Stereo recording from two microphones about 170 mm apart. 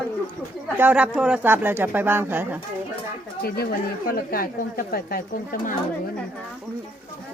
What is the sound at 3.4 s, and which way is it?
Speech, 65° left (ahead or behind).